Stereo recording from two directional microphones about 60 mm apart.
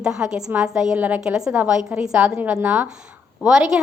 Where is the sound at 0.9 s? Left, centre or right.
Right.